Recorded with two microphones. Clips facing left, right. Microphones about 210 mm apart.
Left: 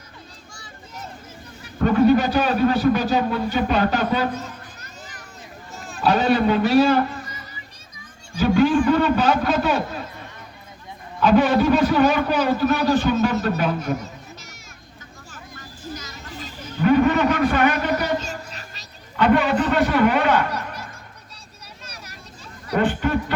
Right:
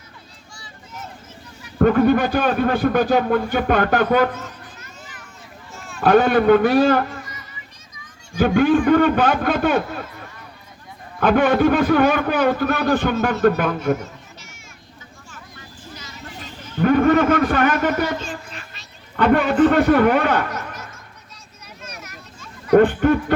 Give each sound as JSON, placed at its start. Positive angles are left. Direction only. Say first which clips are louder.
{"t": 1.8, "sound": "speech", "louder": "right 1 dB", "side_deg": -55}
{"t": 4.4, "sound": "children playing", "louder": "left 1 dB", "side_deg": 40}
{"t": 5.7, "sound": "run", "louder": "left 1 dB", "side_deg": 35}
{"t": 6.0, "sound": "a man's voice", "louder": "right 4 dB", "side_deg": -55}
{"t": 8.4, "sound": "speech", "louder": "right 1 dB", "side_deg": -55}
{"t": 11.2, "sound": "a man's voice", "louder": "right 1 dB", "side_deg": -55}
{"t": 15.3, "sound": "vehicle", "louder": "left 2 dB", "side_deg": 40}
{"t": 16.8, "sound": "a man's voice", "louder": "right 2 dB", "side_deg": -50}
{"t": 18.0, "sound": "music", "louder": "even", "side_deg": 40}
{"t": 19.1, "sound": "a man's voice", "louder": "right 2 dB", "side_deg": -50}
{"t": 20.5, "sound": "a sound", "louder": "left 1 dB", "side_deg": 35}
{"t": 21.8, "sound": "vehicle", "louder": "right 4 dB", "side_deg": 35}
{"t": 22.7, "sound": "speech", "louder": "right 8 dB", "side_deg": -55}